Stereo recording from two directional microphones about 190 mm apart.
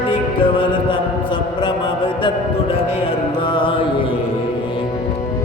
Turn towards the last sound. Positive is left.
turn(degrees=25)  # may be behind; listen again after turning